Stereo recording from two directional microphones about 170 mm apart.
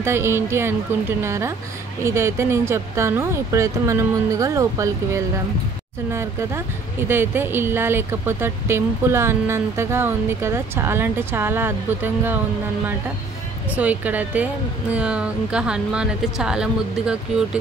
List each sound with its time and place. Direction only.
0.0 s speech: 15° right (ahead or behind)
13.7 s speech: 10° right (ahead or behind)